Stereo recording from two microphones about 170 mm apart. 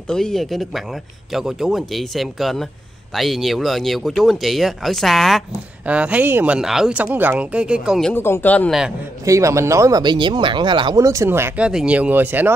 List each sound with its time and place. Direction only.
0.1 s speech: 5° left (ahead or behind)
8.1 s speech: 10° left (ahead or behind)
9.2 s speech: 20° right (ahead or behind)